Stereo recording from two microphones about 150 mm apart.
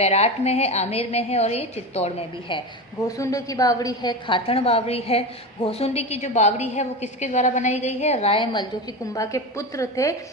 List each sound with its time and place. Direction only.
0.0 s a woman's voice: 45° left (ahead or behind)
9.1 s a woman's voice: 20° left (ahead or behind)